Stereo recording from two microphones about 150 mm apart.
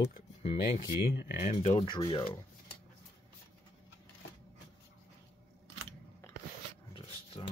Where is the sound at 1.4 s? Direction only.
40° left (ahead or behind).